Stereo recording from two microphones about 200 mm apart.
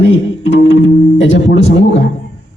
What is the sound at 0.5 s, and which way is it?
Music, 65° left (ahead or behind).